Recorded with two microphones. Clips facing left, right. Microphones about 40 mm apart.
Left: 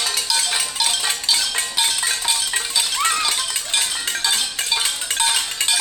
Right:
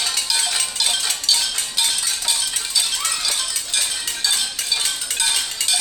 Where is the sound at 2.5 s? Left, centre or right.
Left.